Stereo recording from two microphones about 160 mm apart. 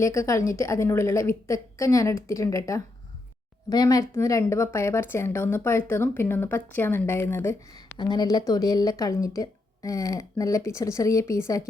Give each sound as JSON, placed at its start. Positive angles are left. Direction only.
{"t": 0.0, "sound": "a woman's voice", "side_deg": 20}
{"t": 7.9, "sound": "speech", "side_deg": 25}